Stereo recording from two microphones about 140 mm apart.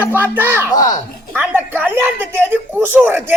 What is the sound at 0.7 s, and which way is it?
Speech, 25° left (ahead or behind).